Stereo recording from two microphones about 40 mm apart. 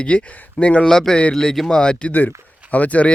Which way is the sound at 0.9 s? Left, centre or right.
Centre.